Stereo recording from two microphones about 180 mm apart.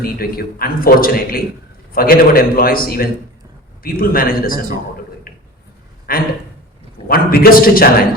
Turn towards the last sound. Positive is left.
turn(degrees=55)  # may be behind; listen again after turning